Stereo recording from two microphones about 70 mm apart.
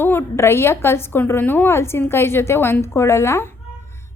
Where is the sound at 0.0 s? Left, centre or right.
Left.